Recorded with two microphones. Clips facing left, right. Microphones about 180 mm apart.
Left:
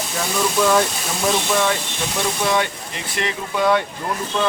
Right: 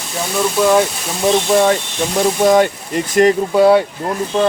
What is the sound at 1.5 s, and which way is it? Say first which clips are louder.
Speech: right 7 dB; 40° right (ahead or behind).